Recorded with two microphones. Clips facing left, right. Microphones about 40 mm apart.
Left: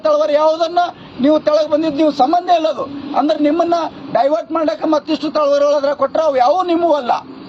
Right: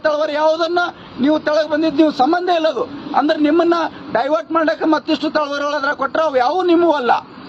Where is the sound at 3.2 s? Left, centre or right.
Right.